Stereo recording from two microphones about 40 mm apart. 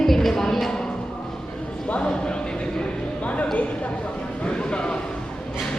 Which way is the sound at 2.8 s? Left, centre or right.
Left.